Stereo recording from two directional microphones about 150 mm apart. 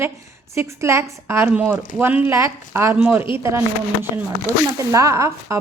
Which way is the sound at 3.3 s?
15° right (ahead or behind).